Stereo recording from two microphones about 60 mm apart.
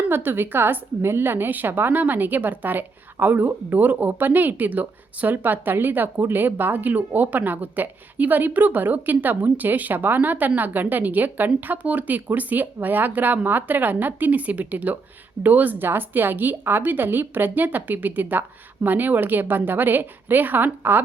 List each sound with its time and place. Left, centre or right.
0.1 s a woman's voice: right